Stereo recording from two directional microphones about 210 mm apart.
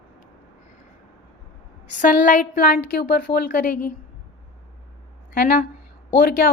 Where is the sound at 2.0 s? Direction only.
40° left (ahead or behind).